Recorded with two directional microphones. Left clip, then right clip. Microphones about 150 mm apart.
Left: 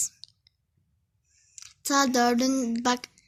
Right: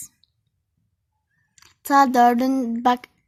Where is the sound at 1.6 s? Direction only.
55° right (ahead or behind).